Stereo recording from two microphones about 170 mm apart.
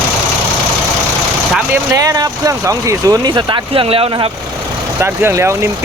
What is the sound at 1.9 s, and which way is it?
Speech, 20° right (ahead or behind).